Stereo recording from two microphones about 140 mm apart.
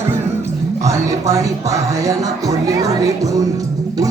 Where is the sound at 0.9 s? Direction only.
20° right (ahead or behind).